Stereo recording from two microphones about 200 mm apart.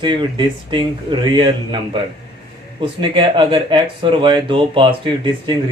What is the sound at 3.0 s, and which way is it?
Speech, 25° right (ahead or behind).